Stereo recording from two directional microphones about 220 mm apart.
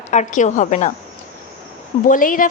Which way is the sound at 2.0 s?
40° left (ahead or behind).